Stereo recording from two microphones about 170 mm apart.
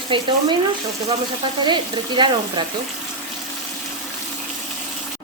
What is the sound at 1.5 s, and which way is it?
Frying, 25° right (ahead or behind).